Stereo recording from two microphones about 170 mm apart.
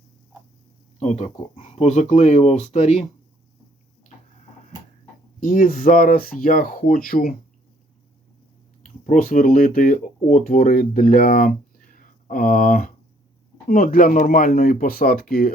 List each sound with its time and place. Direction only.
0.9 s speech: 40° left (ahead or behind)
5.4 s speech: 55° left (ahead or behind)
8.8 s speech: 50° left (ahead or behind)